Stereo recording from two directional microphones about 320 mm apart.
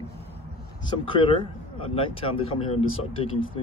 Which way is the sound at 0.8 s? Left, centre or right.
Centre.